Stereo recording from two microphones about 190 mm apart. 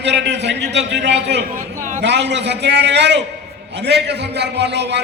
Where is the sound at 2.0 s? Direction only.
65° right (ahead or behind).